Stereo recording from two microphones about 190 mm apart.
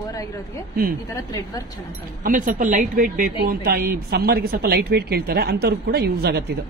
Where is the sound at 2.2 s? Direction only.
45° right (ahead or behind).